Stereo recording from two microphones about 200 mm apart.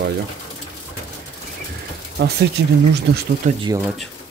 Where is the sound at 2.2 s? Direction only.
55° right (ahead or behind).